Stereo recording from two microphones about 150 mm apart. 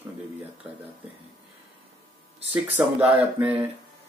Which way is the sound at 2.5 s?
10° right (ahead or behind).